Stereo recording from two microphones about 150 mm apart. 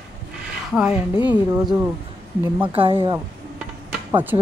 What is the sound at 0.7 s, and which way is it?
Speech, 5° right (ahead or behind).